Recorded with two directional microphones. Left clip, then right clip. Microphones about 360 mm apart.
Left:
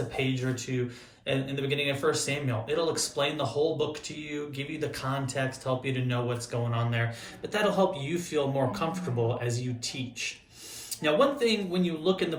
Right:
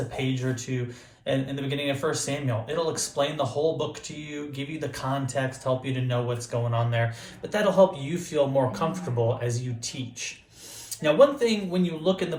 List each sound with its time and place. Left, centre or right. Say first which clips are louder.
0.2 s speech: even; centre